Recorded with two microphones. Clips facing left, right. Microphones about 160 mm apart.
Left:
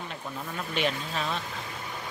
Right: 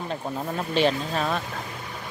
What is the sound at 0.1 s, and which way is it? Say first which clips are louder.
Speech: right 8 dB; 35° right (ahead or behind).